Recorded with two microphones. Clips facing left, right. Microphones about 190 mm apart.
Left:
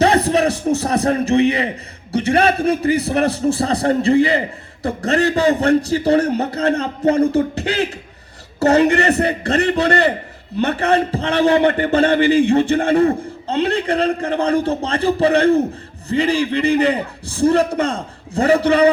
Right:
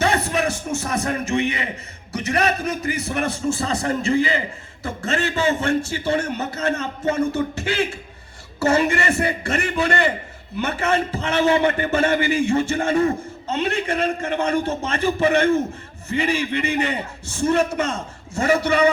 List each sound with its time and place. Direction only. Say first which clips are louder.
0.0 s a man's voice: left 6 dB; 35° left (ahead or behind)